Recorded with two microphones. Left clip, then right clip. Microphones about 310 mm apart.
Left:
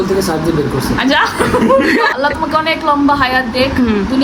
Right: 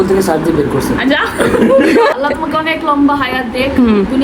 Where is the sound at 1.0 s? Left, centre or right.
Left.